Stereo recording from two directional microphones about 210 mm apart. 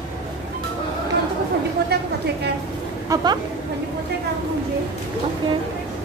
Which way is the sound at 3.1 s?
20° right (ahead or behind).